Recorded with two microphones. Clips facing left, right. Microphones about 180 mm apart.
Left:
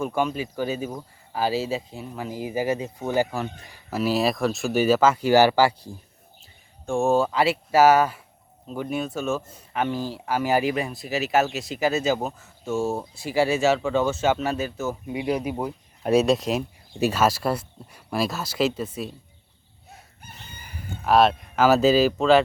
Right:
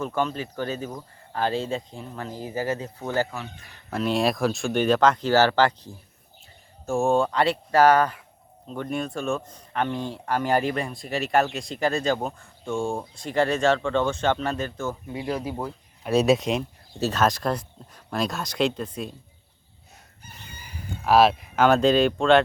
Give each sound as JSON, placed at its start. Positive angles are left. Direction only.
{"t": 0.0, "sound": "speech", "side_deg": 10}
{"t": 16.1, "sound": "speech", "side_deg": 0}
{"t": 21.0, "sound": "speech", "side_deg": 0}